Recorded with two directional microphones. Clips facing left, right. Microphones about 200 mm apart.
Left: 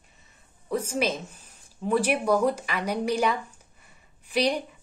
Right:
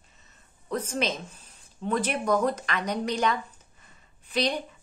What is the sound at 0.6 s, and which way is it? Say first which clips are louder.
A woman's voice: left 2 dB; 10° left (ahead or behind).